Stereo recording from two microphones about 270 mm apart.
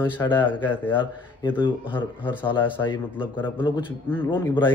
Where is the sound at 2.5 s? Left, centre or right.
Centre.